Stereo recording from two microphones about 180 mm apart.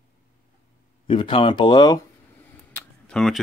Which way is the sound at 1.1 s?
30° left (ahead or behind).